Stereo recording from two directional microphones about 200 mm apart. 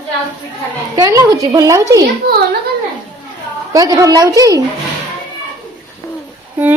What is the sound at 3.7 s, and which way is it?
Speech, 15° right (ahead or behind).